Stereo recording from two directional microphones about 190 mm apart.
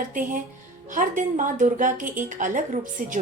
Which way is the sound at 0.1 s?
45° right (ahead or behind).